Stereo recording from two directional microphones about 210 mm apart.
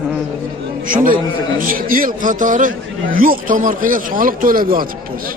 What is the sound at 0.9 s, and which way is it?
A man's voice, 40° right (ahead or behind).